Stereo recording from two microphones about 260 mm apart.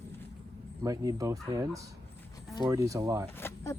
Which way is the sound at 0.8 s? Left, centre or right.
Centre.